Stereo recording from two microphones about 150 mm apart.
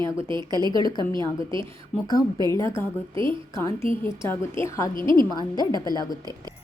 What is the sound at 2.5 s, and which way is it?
A woman's voice, 20° left (ahead or behind).